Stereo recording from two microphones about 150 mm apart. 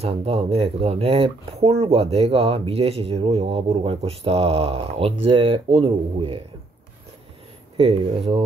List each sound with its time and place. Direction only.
0.0 s speech: 40° right (ahead or behind)
7.7 s speech: 40° right (ahead or behind)